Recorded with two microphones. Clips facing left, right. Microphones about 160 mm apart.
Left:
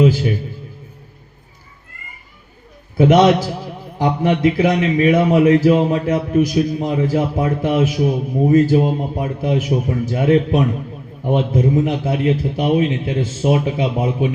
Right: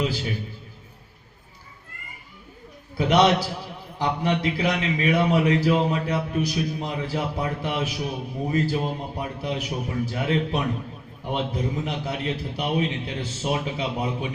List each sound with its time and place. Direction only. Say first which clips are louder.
0.0 s a man's voice: left 12 dB; 45° left (ahead or behind)
3.0 s a man's voice: left 7 dB; 45° left (ahead or behind)